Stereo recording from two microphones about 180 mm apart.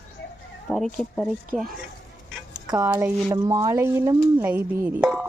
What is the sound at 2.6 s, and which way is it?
Speech, 20° right (ahead or behind).